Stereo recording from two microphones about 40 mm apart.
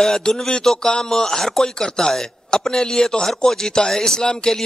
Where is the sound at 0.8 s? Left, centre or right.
Centre.